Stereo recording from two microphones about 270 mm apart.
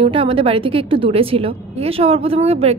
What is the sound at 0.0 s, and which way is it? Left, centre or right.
A woman's voice, centre.